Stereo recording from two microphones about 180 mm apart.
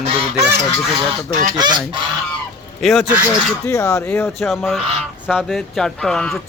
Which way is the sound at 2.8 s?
Centre (ahead or behind).